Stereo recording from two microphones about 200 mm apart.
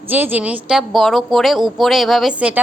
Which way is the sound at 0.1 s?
10° right (ahead or behind).